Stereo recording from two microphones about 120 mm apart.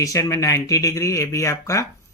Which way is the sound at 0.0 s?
25° left (ahead or behind).